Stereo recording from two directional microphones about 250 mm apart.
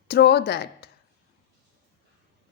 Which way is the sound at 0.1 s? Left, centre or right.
Left.